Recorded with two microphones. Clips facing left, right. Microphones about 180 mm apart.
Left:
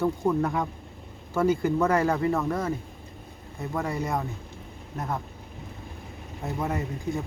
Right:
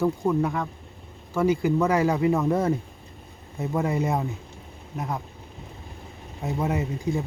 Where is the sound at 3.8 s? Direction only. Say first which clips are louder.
Right 4 dB; 20° right (ahead or behind).